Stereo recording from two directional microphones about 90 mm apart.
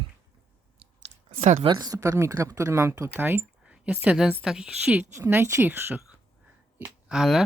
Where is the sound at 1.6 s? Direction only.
45° right (ahead or behind); by 5.0 s 10° right (ahead or behind).